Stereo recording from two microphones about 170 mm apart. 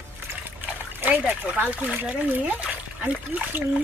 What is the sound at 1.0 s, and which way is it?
Speech, 10° right (ahead or behind).